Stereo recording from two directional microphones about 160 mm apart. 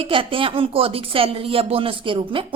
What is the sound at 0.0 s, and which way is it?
A woman's voice, 35° right (ahead or behind).